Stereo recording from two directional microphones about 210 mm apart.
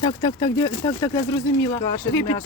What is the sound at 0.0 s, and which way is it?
Speech, 20° left (ahead or behind).